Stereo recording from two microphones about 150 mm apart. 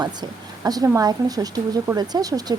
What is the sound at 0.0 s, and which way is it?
A woman's voice, 25° right (ahead or behind).